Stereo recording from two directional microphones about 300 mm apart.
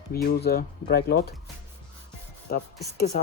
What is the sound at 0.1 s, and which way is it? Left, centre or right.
Speech, left.